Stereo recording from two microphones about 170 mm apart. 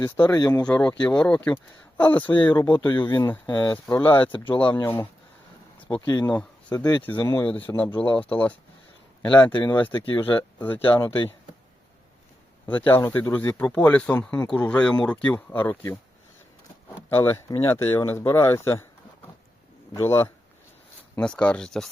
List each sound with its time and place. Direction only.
0.0 s speech: 25° left (ahead or behind)
0.7 s speech: 5° left (ahead or behind)
2.7 s speech: 30° left (ahead or behind)
4.0 s speech: 10° left (ahead or behind)
4.3 s speech: 30° left (ahead or behind)
5.9 s speech: 25° left (ahead or behind)
7.0 s speech: 10° left (ahead or behind)
9.5 s speech: 30° left (ahead or behind)
9.7 s speech: 10° left (ahead or behind)
12.9 s speech: 15° left (ahead or behind)
17.1 s speech: 15° left (ahead or behind)
19.9 s speech: 15° left (ahead or behind)